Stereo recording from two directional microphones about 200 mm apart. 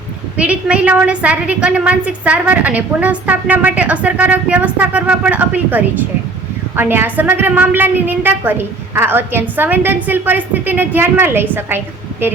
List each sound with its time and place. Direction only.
0.3 s a woman's voice: 5° right (ahead or behind)